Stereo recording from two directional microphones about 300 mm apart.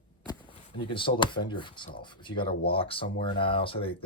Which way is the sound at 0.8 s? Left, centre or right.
Centre.